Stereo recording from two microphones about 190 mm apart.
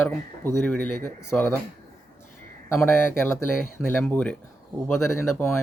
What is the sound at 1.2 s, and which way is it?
Speech, 15° left (ahead or behind).